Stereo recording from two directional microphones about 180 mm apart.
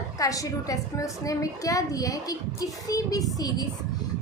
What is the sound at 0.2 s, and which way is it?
A woman's voice, 20° left (ahead or behind).